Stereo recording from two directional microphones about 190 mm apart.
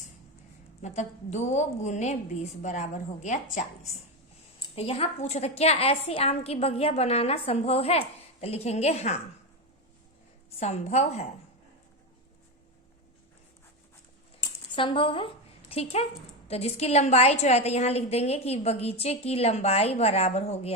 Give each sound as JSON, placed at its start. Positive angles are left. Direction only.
{"t": 0.8, "sound": "a woman's voice", "side_deg": 35}
{"t": 10.6, "sound": "a woman's voice", "side_deg": 35}
{"t": 14.4, "sound": "a sound", "side_deg": 25}
{"t": 15.7, "sound": "a woman's voice", "side_deg": 30}